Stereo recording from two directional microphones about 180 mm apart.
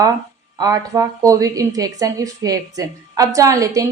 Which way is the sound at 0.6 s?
20° right (ahead or behind).